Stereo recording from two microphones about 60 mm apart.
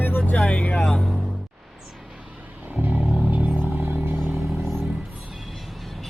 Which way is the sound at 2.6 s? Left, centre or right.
Right.